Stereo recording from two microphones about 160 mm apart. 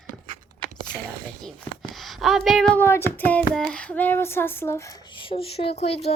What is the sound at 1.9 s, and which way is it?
Female singing, centre (ahead or behind).